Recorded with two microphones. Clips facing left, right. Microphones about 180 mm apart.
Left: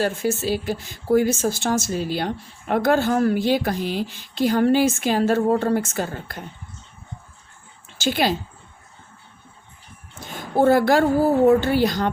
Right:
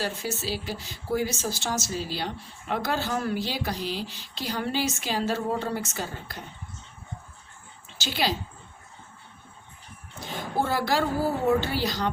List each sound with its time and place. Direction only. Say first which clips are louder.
0.0 s speech: left 8 dB; 50° left (ahead or behind)
7.9 s speech: left 7 dB; 50° left (ahead or behind)
10.2 s speech: left 10 dB; 50° left (ahead or behind)